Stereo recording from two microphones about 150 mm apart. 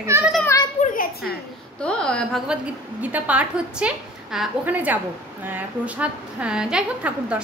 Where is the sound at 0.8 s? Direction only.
70° left (ahead or behind).